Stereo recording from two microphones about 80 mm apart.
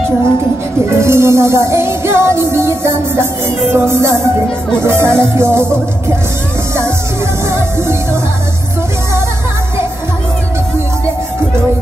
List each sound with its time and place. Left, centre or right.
0.8 s music: right
7.5 s music: right